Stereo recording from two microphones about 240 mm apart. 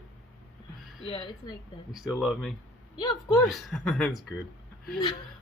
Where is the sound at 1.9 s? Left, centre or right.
Centre.